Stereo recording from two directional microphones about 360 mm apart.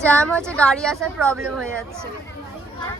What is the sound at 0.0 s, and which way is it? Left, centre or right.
A woman's voice, centre.